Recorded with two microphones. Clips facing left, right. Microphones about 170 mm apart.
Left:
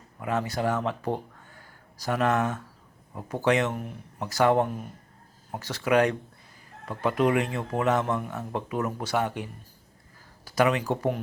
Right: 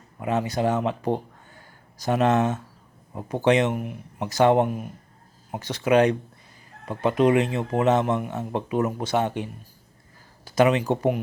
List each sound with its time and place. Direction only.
0.2 s speech: 20° right (ahead or behind)